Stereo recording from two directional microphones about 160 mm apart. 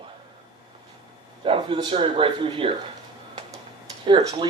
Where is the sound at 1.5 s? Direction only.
35° right (ahead or behind).